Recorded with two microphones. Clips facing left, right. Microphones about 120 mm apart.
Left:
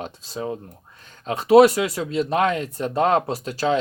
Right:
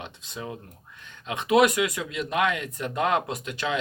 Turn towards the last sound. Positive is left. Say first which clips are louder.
# left 7 dB
turn(degrees=35)  # may be behind; listen again after turning